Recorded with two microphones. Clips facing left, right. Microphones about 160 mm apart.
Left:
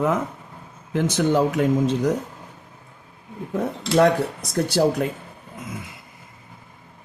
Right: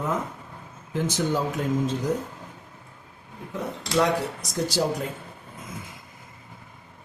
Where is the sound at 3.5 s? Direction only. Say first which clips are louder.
Left 5 dB; 55° left (ahead or behind).